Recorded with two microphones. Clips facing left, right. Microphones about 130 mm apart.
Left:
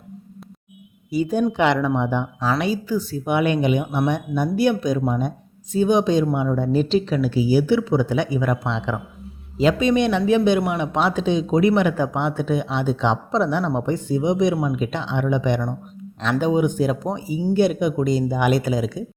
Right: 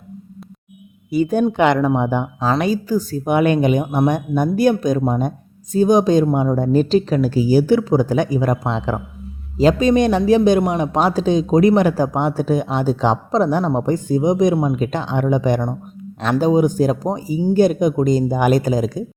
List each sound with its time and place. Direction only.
1.1 s speech: 55° right (ahead or behind)